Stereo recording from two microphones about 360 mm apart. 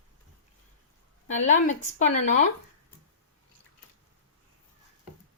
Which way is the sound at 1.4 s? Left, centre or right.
Centre.